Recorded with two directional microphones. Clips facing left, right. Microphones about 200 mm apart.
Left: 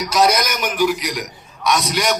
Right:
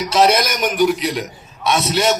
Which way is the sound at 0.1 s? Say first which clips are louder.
Right 2 dB; 30° right (ahead or behind).